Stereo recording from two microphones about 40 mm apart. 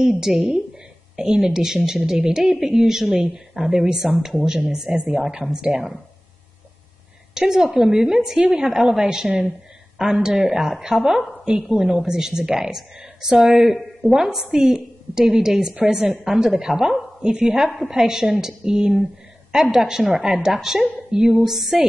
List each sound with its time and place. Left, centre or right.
0.2 s a woman's voice: centre
3.5 s speech: right
3.8 s a woman's voice: centre
7.3 s a woman's voice: centre